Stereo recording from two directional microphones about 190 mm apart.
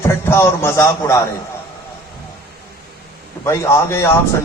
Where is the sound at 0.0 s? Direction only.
15° left (ahead or behind).